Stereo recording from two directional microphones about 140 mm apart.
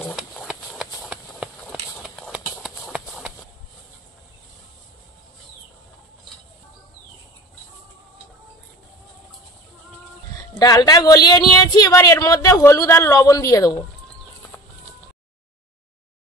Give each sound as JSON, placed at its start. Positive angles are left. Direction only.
{"t": 0.1, "sound": "a sound", "side_deg": 0}
{"t": 2.6, "sound": "shuffle", "side_deg": -5}
{"t": 10.6, "sound": "a woman's voice", "side_deg": 25}